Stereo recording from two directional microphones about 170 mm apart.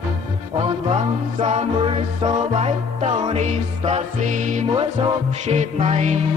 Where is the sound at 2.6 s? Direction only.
40° right (ahead or behind).